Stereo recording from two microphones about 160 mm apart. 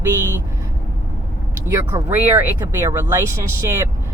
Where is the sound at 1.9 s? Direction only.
20° right (ahead or behind).